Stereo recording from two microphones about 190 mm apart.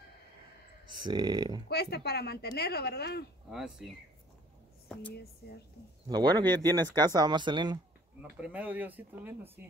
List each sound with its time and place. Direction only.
0.8 s speech: 20° right (ahead or behind)
1.7 s speech: 60° left (ahead or behind)
3.4 s speech: 5° right (ahead or behind)
4.8 s a sound: 10° left (ahead or behind)
6.0 s speech: 20° right (ahead or behind)
8.2 s speech: 5° right (ahead or behind)